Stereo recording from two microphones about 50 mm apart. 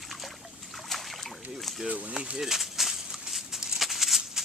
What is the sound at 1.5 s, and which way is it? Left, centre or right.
Boat, centre.